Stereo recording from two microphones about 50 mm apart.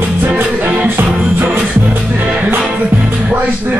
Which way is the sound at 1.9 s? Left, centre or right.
Right.